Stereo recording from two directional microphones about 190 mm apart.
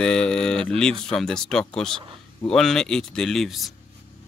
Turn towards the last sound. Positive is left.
turn(degrees=0)  # may be behind; listen again after turning